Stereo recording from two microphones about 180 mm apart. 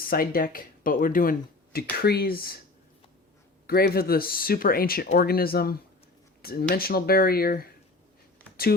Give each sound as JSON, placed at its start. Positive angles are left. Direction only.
{"t": 0.0, "sound": "speech", "side_deg": 55}
{"t": 3.7, "sound": "speech", "side_deg": 55}